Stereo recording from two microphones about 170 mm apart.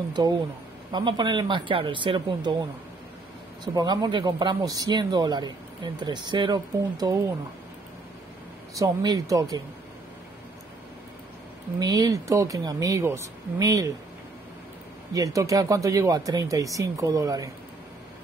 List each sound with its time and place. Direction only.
0.2 s speech: 25° right (ahead or behind)
8.7 s speech: 20° right (ahead or behind)
11.8 s speech: 25° right (ahead or behind)
15.1 s speech: 20° right (ahead or behind)